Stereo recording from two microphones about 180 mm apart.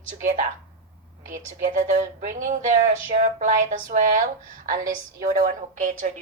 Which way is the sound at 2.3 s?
45° right (ahead or behind).